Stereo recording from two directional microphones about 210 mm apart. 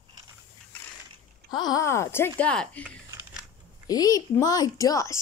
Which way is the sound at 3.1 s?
10° right (ahead or behind).